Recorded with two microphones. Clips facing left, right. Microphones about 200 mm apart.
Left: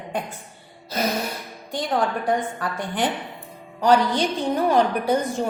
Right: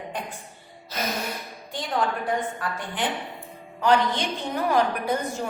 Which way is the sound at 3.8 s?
35° left (ahead or behind).